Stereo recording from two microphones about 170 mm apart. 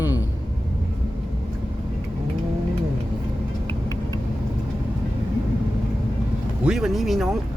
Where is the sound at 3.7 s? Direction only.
20° left (ahead or behind).